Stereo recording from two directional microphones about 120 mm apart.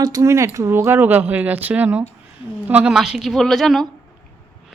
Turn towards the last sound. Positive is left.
turn(degrees=0)  # may be behind; listen again after turning